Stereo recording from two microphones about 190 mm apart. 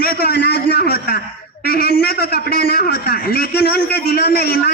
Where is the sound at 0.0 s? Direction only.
60° left (ahead or behind).